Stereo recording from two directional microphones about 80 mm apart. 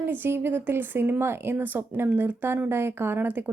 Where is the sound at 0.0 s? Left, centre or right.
Right.